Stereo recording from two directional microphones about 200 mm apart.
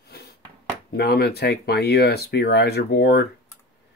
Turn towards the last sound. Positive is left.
turn(degrees=55)  # may be behind; listen again after turning